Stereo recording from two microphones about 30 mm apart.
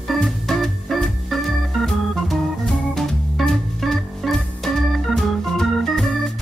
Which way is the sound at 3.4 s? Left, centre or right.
Centre.